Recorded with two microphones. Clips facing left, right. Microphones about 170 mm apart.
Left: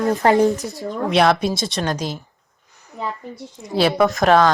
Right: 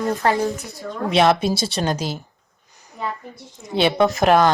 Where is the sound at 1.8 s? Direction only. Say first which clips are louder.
Even; 30° right (ahead or behind).